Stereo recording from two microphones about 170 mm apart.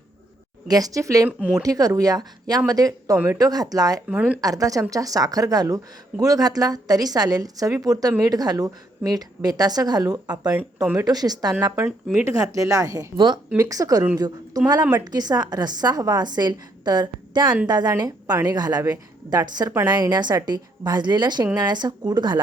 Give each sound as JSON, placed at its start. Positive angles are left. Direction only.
{"t": 0.7, "sound": "a woman's voice", "side_deg": -20}
{"t": 1.4, "sound": "speech", "side_deg": -5}
{"t": 1.6, "sound": "a woman's voice", "side_deg": -20}
{"t": 4.1, "sound": "speech", "side_deg": -10}
{"t": 4.4, "sound": "a woman's voice", "side_deg": -20}
{"t": 11.9, "sound": "speech", "side_deg": 0}
{"t": 12.2, "sound": "a woman's voice", "side_deg": -20}